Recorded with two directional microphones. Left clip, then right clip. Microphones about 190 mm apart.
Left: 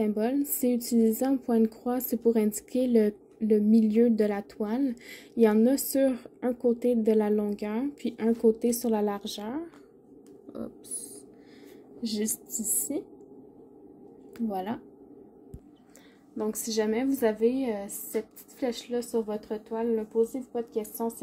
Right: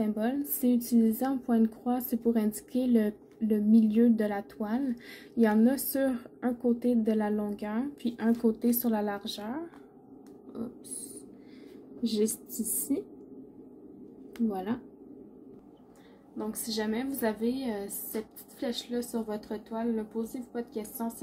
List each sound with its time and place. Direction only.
0.0 s a woman's voice: 35° left (ahead or behind)
12.0 s a woman's voice: 35° left (ahead or behind)
14.5 s a woman's voice: 35° left (ahead or behind)
16.3 s a woman's voice: 45° left (ahead or behind)